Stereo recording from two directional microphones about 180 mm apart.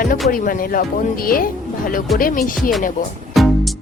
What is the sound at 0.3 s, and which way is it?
Speech, 50° left (ahead or behind).